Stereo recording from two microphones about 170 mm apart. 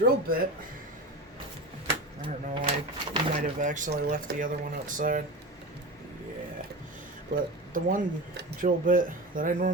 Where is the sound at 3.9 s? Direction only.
70° right (ahead or behind); by 5.2 s 50° right (ahead or behind).